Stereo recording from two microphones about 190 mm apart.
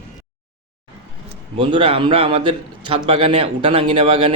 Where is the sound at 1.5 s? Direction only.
25° right (ahead or behind).